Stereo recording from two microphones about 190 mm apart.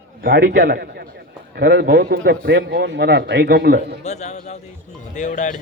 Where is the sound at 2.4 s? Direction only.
65° right (ahead or behind).